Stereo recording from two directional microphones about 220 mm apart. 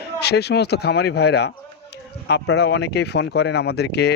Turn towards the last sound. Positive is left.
turn(degrees=50)  # may be behind; listen again after turning